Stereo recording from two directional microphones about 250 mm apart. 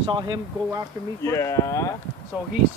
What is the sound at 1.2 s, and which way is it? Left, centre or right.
Speech, centre.